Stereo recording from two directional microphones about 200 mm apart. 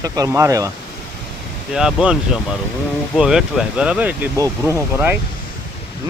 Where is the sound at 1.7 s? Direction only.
5° right (ahead or behind).